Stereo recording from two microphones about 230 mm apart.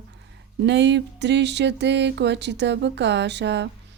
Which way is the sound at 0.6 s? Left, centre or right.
Right.